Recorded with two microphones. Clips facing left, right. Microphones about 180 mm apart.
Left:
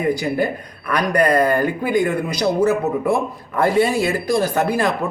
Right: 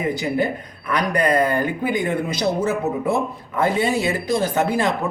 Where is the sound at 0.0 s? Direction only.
20° right (ahead or behind).